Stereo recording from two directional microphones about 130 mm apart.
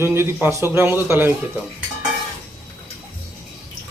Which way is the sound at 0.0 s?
20° right (ahead or behind).